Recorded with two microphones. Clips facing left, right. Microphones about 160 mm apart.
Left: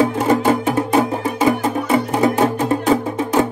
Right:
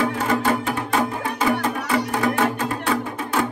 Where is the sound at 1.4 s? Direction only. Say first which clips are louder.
Left 4 dB; 20° left (ahead or behind).